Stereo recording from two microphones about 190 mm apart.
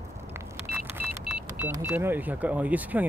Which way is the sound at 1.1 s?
10° right (ahead or behind).